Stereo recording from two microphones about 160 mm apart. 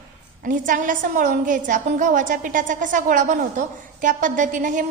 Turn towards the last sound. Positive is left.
turn(degrees=-55)  # may be behind; listen again after turning